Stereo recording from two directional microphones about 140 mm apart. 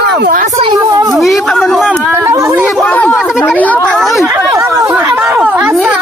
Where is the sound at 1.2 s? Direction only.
Centre (ahead or behind).